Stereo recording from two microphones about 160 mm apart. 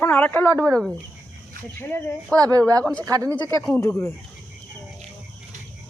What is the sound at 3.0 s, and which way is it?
Speech, 20° right (ahead or behind).